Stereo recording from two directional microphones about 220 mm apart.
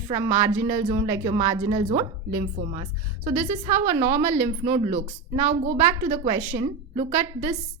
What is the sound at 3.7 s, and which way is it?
A woman's voice, 30° right (ahead or behind).